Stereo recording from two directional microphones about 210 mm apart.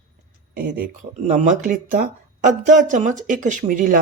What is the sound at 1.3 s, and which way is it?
Speech, 35° right (ahead or behind).